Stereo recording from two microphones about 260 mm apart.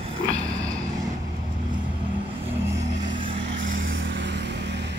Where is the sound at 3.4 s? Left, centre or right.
Right.